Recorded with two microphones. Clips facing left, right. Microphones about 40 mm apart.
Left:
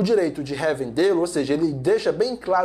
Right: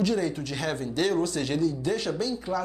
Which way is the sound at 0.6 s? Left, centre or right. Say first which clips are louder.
Left 8 dB; left.